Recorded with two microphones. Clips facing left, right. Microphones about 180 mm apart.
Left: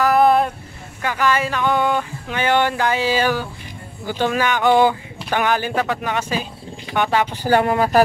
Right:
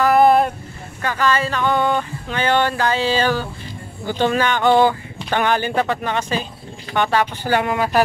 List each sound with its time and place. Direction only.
0.0 s vehicle: centre (ahead or behind)
1.0 s a sound: 15° left (ahead or behind)
4.0 s speech: 5° left (ahead or behind)
7.4 s speech: 40° left (ahead or behind)